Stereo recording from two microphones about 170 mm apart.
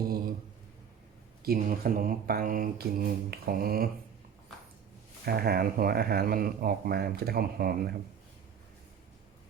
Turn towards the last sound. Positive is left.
turn(degrees=-60)  # may be behind; listen again after turning